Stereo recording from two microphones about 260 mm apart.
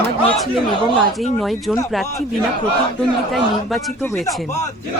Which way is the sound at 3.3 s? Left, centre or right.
Centre.